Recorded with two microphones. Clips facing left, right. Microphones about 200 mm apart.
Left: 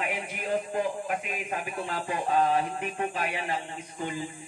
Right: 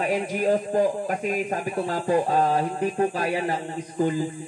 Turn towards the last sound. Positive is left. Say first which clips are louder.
# right 10 dB
turn(degrees=-40)  # may be behind; listen again after turning